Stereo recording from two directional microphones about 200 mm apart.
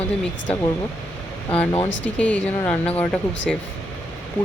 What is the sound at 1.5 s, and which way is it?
Speech, 10° left (ahead or behind).